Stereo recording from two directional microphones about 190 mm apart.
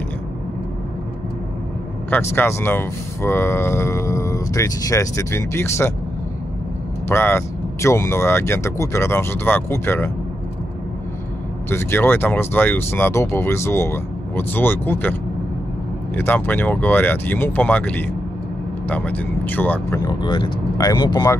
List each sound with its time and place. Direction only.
2.0 s speech: 10° left (ahead or behind)
7.1 s speech: 10° left (ahead or behind)
11.7 s speech: 10° left (ahead or behind)
16.2 s speech: 10° left (ahead or behind)
20.1 s speech: 25° left (ahead or behind)